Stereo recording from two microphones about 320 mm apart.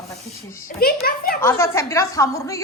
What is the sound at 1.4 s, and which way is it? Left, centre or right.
A woman's voice, centre.